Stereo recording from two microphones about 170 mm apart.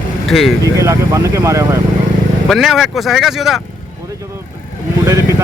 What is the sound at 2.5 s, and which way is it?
Speech, centre (ahead or behind).